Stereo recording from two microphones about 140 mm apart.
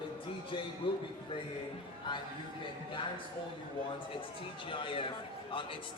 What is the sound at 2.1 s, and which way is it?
Speech, 35° left (ahead or behind).